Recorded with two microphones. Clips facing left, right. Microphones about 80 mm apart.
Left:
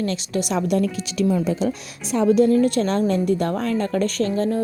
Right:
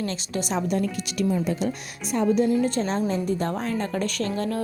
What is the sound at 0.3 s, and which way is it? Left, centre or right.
Speech, left.